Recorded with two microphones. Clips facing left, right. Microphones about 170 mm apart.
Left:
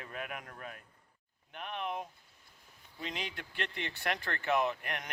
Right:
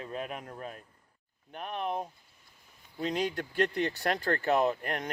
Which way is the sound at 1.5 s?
40° right (ahead or behind).